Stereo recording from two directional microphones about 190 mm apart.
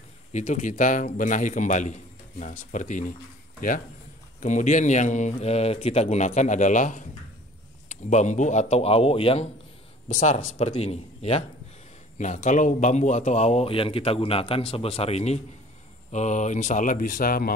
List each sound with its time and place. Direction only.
0.3 s a man's voice: 40° left (ahead or behind)
4.4 s a man's voice: 40° left (ahead or behind)
8.1 s a man's voice: 40° left (ahead or behind)